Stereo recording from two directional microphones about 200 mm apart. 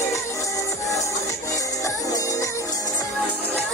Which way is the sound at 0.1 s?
15° left (ahead or behind).